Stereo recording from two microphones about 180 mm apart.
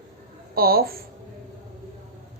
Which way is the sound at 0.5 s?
55° right (ahead or behind).